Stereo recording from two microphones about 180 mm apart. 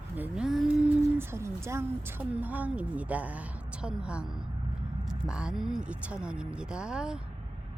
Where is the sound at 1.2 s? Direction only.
15° right (ahead or behind).